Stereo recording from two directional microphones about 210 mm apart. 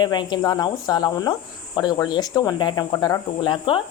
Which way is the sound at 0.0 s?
20° left (ahead or behind).